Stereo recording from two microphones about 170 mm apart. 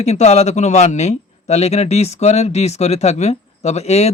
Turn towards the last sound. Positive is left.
turn(degrees=40)  # may be behind; listen again after turning